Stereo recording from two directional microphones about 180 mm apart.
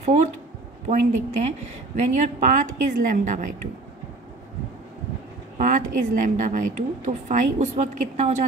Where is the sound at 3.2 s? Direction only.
45° right (ahead or behind).